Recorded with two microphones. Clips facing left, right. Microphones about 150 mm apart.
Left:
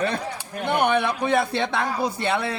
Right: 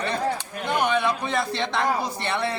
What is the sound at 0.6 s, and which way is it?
Speech, 60° left (ahead or behind).